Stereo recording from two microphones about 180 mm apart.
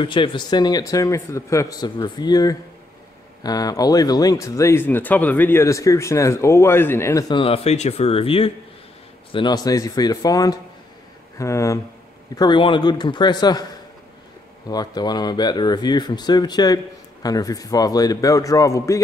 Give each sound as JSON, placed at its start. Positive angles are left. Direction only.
{"t": 0.0, "sound": "speech", "side_deg": 25}